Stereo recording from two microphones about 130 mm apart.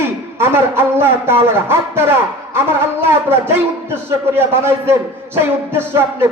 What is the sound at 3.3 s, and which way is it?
A man's voice, 20° right (ahead or behind).